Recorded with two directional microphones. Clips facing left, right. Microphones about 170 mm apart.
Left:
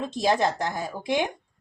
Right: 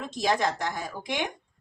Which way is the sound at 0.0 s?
30° left (ahead or behind).